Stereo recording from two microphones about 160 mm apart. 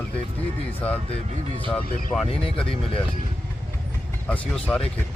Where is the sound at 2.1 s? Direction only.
10° left (ahead or behind).